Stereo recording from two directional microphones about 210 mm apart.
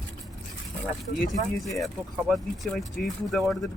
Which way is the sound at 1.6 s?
Centre (ahead or behind).